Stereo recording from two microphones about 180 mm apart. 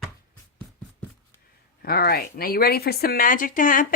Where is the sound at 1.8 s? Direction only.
55° left (ahead or behind).